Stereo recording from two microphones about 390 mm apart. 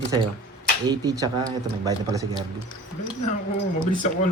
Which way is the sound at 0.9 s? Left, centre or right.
Centre.